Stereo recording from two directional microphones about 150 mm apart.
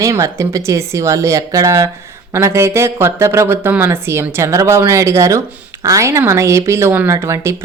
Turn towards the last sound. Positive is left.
turn(degrees=-20)  # may be behind; listen again after turning